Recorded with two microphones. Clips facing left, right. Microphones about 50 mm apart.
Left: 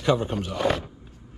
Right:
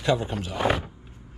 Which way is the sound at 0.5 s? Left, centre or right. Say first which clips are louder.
Right 1 dB; centre.